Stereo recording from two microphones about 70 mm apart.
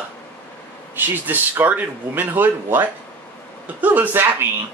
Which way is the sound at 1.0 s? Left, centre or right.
Right.